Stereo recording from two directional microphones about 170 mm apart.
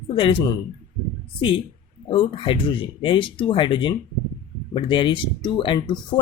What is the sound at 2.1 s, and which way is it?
Speech, 30° left (ahead or behind).